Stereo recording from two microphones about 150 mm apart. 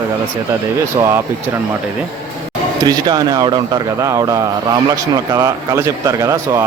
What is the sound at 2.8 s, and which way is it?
Speech, 25° right (ahead or behind).